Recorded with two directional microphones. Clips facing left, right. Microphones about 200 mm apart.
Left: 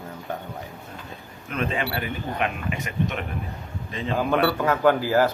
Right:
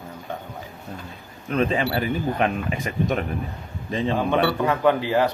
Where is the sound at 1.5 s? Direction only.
35° right (ahead or behind).